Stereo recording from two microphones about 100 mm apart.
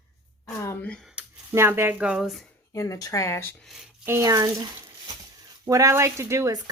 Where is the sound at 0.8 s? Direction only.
10° left (ahead or behind).